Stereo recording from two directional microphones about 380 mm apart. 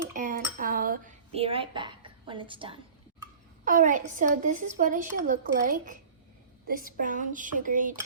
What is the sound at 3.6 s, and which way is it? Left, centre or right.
A woman's voice, right.